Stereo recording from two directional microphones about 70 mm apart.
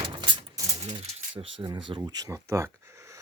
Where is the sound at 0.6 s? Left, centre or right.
Right.